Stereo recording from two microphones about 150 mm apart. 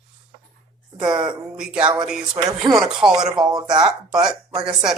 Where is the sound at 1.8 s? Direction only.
30° right (ahead or behind).